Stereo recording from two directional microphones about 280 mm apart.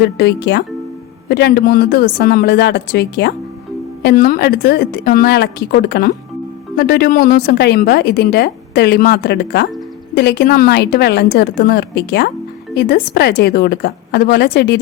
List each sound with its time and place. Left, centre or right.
0.0 s a woman's voice: left